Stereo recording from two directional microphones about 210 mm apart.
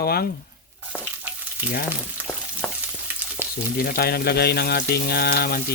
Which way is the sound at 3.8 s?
45° left (ahead or behind).